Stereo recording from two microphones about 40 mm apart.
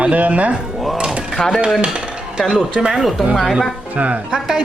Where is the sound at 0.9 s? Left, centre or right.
Right.